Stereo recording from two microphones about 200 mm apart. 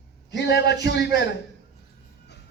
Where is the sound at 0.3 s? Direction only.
55° left (ahead or behind).